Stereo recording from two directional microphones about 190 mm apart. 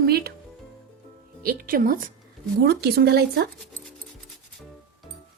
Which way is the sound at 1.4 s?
50° right (ahead or behind).